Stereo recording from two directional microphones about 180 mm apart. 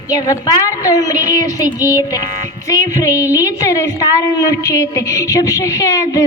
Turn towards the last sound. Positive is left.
turn(degrees=20)  # may be behind; listen again after turning